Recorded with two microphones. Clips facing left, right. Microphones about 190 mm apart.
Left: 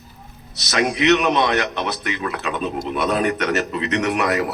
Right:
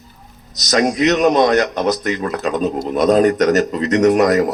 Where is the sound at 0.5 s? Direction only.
40° right (ahead or behind).